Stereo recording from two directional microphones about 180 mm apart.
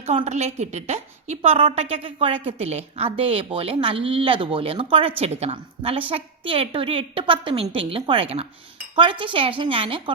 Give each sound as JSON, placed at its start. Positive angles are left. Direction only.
{"t": 0.0, "sound": "a woman's voice", "side_deg": -35}